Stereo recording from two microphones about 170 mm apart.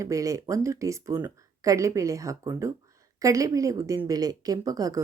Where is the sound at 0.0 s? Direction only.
20° right (ahead or behind).